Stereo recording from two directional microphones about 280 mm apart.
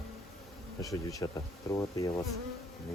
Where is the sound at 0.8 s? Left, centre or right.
Centre.